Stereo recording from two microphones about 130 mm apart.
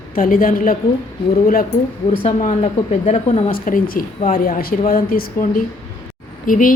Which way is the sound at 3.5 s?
90° left.